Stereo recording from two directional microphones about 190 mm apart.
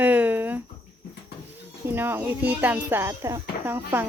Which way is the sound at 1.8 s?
10° right (ahead or behind).